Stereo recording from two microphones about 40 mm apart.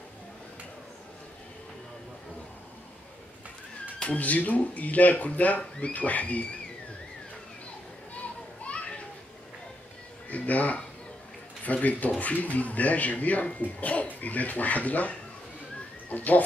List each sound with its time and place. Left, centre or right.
4.0 s speech: left
8.6 s children playing: left
10.3 s speech: left